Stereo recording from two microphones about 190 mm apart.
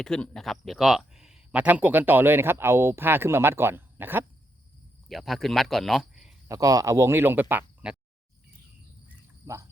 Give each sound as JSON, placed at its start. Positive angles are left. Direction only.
{"t": 0.0, "sound": "speech", "side_deg": 5}
{"t": 5.0, "sound": "speech", "side_deg": 0}
{"t": 6.5, "sound": "speech", "side_deg": -15}
{"t": 9.0, "sound": "cricket", "side_deg": -15}